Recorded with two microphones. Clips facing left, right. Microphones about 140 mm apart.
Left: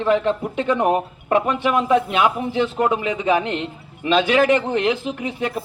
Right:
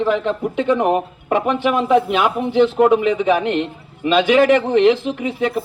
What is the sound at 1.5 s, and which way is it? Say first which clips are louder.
Speech: right 5 dB; 5° right (ahead or behind).